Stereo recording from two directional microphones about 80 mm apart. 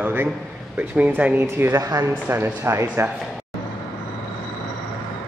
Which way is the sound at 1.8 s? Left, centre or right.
Right.